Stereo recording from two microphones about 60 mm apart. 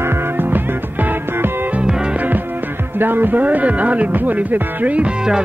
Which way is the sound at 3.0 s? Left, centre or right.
Right.